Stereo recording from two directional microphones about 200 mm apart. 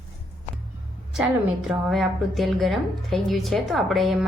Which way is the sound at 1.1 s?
Centre (ahead or behind).